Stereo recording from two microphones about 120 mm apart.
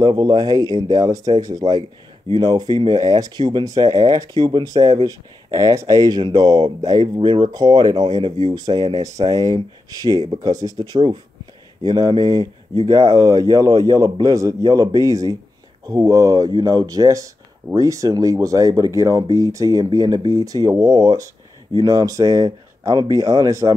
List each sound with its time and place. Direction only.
0.0 s speech: 35° right (ahead or behind)